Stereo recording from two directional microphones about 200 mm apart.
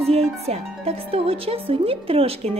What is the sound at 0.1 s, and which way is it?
Speech, 30° right (ahead or behind).